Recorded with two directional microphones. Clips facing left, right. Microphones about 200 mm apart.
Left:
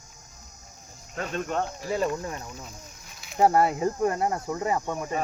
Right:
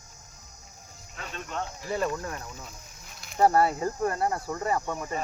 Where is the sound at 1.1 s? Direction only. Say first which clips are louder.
Left 8 dB; 45° left (ahead or behind).